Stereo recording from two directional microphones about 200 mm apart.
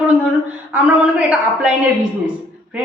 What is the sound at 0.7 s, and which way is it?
Speech, 5° right (ahead or behind).